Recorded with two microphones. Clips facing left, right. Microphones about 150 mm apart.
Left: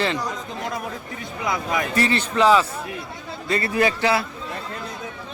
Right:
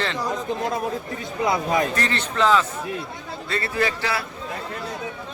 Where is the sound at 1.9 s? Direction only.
10° left (ahead or behind).